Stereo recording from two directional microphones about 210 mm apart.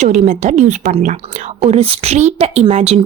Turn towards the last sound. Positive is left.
turn(degrees=-30)  # may be behind; listen again after turning